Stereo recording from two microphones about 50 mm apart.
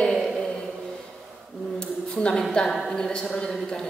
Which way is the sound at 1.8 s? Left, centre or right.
Centre.